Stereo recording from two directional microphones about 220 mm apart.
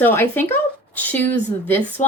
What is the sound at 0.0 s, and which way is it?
A woman's voice, 10° left (ahead or behind).